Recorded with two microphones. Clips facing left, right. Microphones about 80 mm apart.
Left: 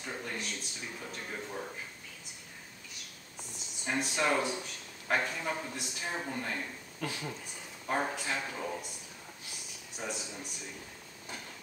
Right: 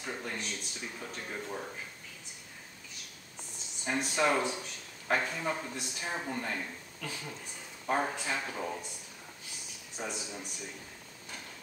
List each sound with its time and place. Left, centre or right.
0.0 s a sound: centre
3.8 s a man's voice: centre
7.0 s speech: left
7.8 s speech: centre
10.0 s a man's voice: centre